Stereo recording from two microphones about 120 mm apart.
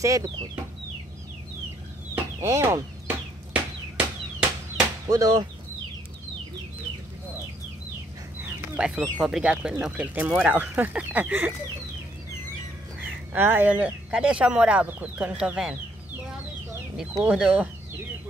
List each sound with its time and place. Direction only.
0.0 s speech: 30° right (ahead or behind)
2.4 s speech: 25° right (ahead or behind)
3.9 s chop: 10° right (ahead or behind)
5.0 s speech: 30° right (ahead or behind)
8.7 s speech: 10° right (ahead or behind)
13.0 s speech: 15° right (ahead or behind)
17.2 s speech: 10° right (ahead or behind)